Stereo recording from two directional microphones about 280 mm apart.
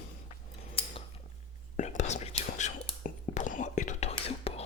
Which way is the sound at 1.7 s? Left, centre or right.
Left.